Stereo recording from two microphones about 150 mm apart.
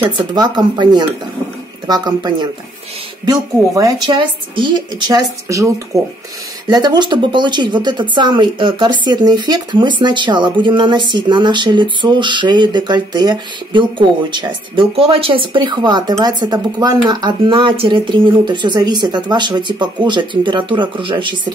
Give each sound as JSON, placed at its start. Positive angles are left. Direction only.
{"t": 0.3, "sound": "a woman's voice", "side_deg": -30}